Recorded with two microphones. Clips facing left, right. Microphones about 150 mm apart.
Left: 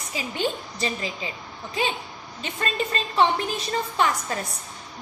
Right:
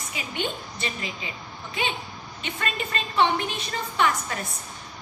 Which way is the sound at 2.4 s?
35° left (ahead or behind).